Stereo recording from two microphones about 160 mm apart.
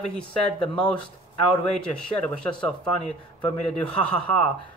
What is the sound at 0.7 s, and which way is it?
Speech, 5° left (ahead or behind).